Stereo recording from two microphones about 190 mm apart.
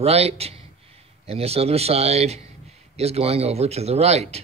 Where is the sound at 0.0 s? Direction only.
35° right (ahead or behind).